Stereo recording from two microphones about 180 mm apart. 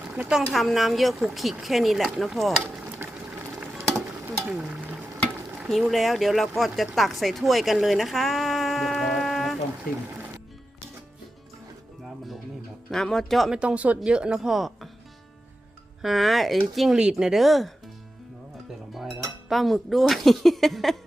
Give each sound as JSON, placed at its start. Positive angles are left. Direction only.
{"t": 0.1, "sound": "speech", "side_deg": -5}
{"t": 3.6, "sound": "a sound", "side_deg": 0}
{"t": 4.3, "sound": "stir", "side_deg": -5}
{"t": 5.5, "sound": "speech", "side_deg": 0}
{"t": 9.9, "sound": "speech", "side_deg": 50}
{"t": 12.9, "sound": "speech", "side_deg": 5}
{"t": 16.0, "sound": "speech", "side_deg": 0}
{"t": 19.5, "sound": "speech", "side_deg": 0}